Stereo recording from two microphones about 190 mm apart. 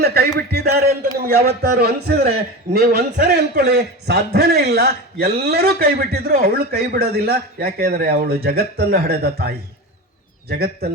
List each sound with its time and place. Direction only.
0.0 s a man's voice: 55° right (ahead or behind)